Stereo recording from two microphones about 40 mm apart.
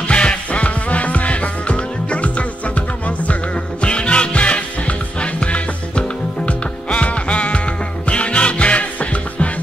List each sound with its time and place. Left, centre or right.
0.0 s music: left